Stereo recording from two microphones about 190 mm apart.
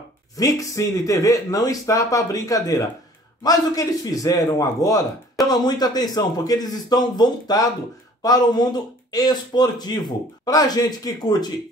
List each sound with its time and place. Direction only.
0.4 s speech: 15° left (ahead or behind)